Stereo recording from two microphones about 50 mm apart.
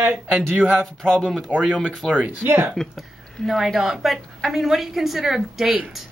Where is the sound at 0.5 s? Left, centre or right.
Right.